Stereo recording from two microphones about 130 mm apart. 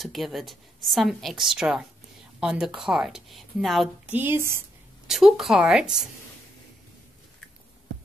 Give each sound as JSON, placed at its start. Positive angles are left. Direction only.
{"t": 0.0, "sound": "a woman's voice", "side_deg": 0}
{"t": 4.1, "sound": "speech", "side_deg": -15}
{"t": 5.0, "sound": "a woman's voice", "side_deg": 0}